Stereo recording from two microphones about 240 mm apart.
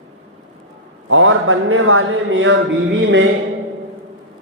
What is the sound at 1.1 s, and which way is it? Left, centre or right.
Speech, right.